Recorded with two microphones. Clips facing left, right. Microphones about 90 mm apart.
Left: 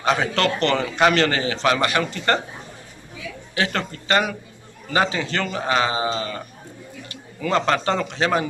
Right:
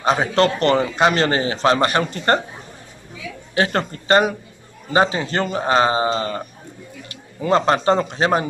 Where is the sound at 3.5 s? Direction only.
40° right (ahead or behind).